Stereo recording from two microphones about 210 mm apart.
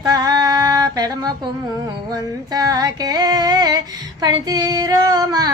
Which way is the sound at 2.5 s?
20° right (ahead or behind).